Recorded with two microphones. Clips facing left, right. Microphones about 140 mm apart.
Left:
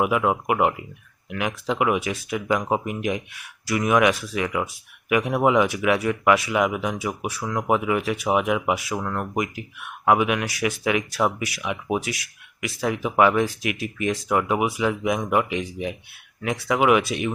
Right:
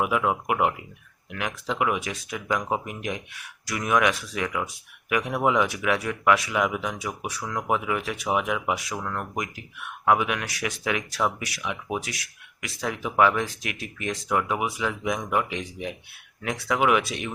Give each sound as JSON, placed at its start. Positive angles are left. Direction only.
{"t": 0.0, "sound": "speech", "side_deg": 5}
{"t": 9.0, "sound": "speech", "side_deg": 20}
{"t": 9.3, "sound": "speech", "side_deg": 5}